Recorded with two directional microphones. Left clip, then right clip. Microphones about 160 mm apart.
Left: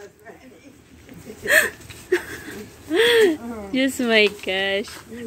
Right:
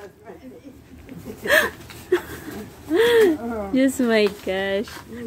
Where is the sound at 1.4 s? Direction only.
10° right (ahead or behind).